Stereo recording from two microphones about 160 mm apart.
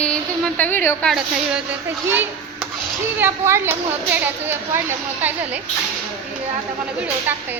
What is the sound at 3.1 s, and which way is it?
A woman's voice, 15° right (ahead or behind).